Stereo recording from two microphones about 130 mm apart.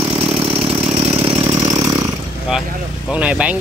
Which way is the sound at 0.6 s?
45° right (ahead or behind).